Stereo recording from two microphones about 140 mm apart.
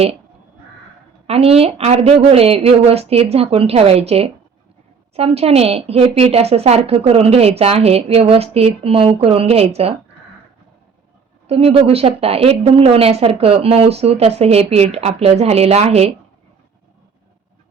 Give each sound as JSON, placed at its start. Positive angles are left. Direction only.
{"t": 1.3, "sound": "a woman's voice", "side_deg": -45}
{"t": 11.4, "sound": "a woman's voice", "side_deg": -45}